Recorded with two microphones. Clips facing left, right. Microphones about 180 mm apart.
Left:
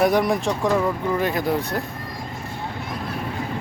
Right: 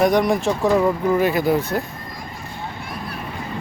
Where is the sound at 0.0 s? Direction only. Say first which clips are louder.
Right 2 dB; 5° left (ahead or behind).